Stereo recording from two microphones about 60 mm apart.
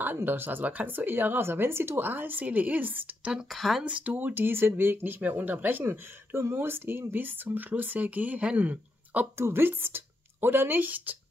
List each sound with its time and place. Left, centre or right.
0.0 s speech: right
3.4 s speech: centre
3.8 s speech: right
9.4 s a woman's voice: right